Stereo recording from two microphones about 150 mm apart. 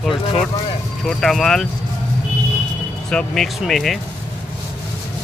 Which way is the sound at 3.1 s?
5° left (ahead or behind).